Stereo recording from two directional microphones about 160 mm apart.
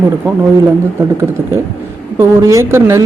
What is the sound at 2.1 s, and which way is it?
Speech, 15° right (ahead or behind).